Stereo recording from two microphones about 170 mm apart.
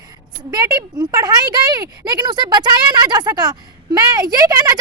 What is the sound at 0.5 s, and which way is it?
Speech, 25° right (ahead or behind).